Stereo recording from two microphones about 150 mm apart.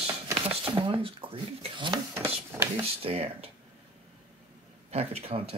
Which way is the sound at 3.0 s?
40° right (ahead or behind).